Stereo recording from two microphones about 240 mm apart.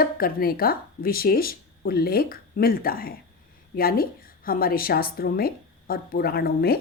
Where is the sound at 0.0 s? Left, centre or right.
Left.